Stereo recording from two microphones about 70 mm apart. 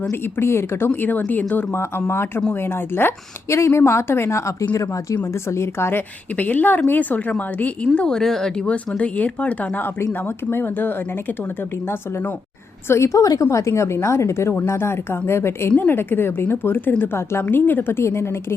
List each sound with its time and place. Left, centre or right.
0.1 s a woman's voice: left
1.3 s speech: left
1.7 s a woman's voice: left
6.3 s speech: left
7.9 s speech: centre; by 10.9 s left
12.9 s a woman's voice: left